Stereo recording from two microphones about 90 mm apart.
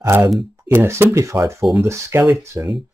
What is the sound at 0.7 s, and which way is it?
Speech, 25° right (ahead or behind).